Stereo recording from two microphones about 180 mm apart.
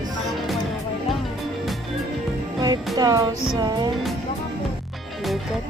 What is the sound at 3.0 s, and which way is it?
Music, 20° right (ahead or behind).